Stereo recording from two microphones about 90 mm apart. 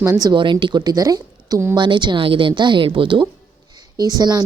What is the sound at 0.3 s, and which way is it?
A woman's voice, 60° right (ahead or behind).